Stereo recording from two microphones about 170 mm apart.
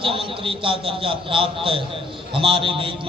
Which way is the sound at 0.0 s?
30° right (ahead or behind).